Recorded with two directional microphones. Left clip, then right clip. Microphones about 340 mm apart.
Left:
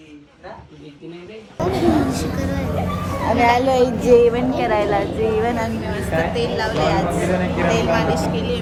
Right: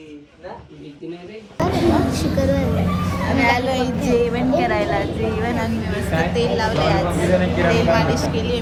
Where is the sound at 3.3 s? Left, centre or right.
Centre.